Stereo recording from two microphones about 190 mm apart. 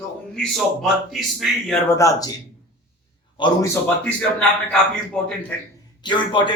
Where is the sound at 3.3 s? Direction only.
25° left (ahead or behind).